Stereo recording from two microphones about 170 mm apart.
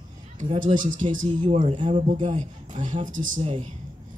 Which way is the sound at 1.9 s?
45° right (ahead or behind).